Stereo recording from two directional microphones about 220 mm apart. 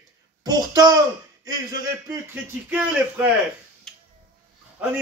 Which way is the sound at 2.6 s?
5° right (ahead or behind).